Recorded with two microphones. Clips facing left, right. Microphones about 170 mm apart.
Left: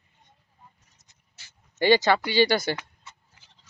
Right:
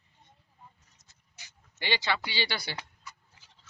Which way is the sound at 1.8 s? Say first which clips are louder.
Left 12 dB; 45° left (ahead or behind).